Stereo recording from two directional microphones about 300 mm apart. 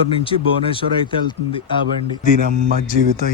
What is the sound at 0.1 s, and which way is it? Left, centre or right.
Speech, centre.